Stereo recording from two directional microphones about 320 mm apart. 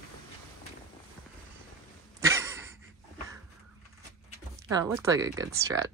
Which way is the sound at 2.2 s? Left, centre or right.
Centre.